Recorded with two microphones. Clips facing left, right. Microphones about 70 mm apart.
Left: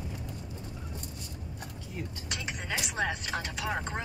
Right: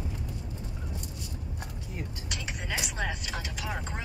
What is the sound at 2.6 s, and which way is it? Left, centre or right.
Speech, centre.